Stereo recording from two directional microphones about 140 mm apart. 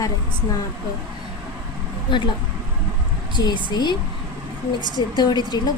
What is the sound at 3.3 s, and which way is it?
Speech, 35° left (ahead or behind).